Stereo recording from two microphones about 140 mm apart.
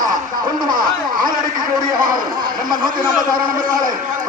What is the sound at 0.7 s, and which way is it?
Speech, 85° right.